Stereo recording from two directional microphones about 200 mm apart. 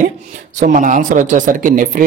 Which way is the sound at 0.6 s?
40° right (ahead or behind).